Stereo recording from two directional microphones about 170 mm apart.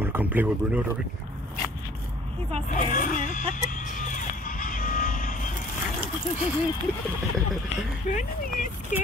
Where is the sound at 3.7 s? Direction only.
50° left (ahead or behind).